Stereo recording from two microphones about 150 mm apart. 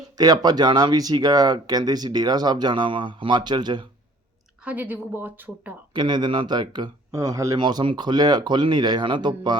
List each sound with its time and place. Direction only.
0.2 s speech: 25° right (ahead or behind)
4.6 s a woman's voice: 10° right (ahead or behind)
5.9 s speech: 30° right (ahead or behind)